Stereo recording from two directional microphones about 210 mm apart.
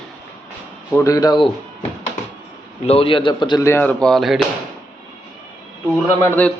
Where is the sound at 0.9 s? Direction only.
15° left (ahead or behind).